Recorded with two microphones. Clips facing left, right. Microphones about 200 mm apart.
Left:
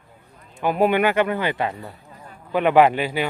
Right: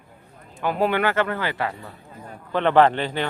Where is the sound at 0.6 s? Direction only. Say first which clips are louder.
Left 3 dB; 15° left (ahead or behind).